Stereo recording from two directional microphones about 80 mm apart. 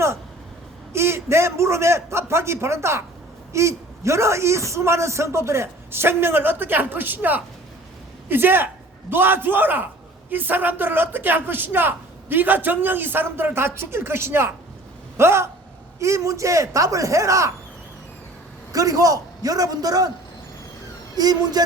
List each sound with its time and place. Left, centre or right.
0.9 s a man's voice: right
18.7 s a man's voice: right
21.2 s a man's voice: right